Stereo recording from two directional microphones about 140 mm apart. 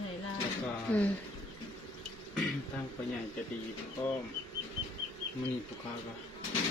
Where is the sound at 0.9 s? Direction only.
10° left (ahead or behind).